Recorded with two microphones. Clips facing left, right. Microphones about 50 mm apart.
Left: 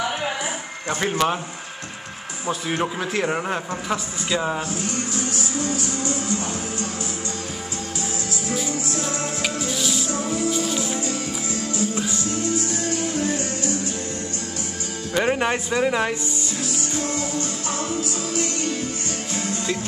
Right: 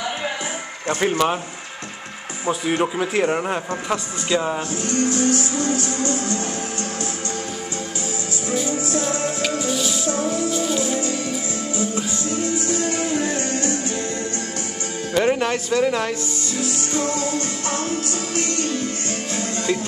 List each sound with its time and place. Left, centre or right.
0.8 s a man's voice: centre
2.4 s a man's voice: centre
4.8 s music: right
12.9 s music: right
15.1 s speech: centre
16.6 s music: right